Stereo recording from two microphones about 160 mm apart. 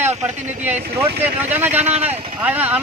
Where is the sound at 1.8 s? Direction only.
40° right (ahead or behind).